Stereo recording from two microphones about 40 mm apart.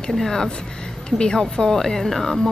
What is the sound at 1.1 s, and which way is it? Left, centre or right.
A woman's voice, centre.